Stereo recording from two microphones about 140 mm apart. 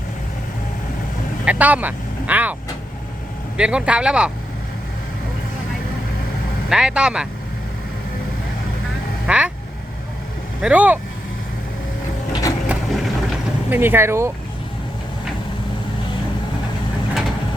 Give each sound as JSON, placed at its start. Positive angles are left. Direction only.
{"t": 1.5, "sound": "speech", "side_deg": -10}
{"t": 3.6, "sound": "speech", "side_deg": -5}
{"t": 6.7, "sound": "speech", "side_deg": -5}
{"t": 9.2, "sound": "vehicle", "side_deg": -10}
{"t": 10.6, "sound": "speech", "side_deg": -10}
{"t": 12.3, "sound": "vehicle", "side_deg": 25}
{"t": 12.6, "sound": "vehicle", "side_deg": 0}
{"t": 13.7, "sound": "speech", "side_deg": -15}